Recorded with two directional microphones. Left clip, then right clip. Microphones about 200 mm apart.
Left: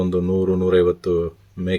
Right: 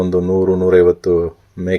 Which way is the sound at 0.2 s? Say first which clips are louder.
Right 6 dB; centre (ahead or behind).